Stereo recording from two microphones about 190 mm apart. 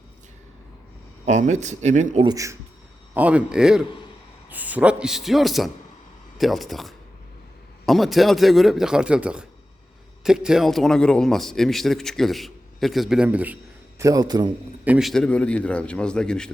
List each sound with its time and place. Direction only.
1.2 s speech: 40° right (ahead or behind)
2.2 s a man's voice: 15° right (ahead or behind)
3.2 s a man's voice: 5° right (ahead or behind)
14.0 s a man's voice: 20° right (ahead or behind)
14.8 s a man's voice: centre (ahead or behind)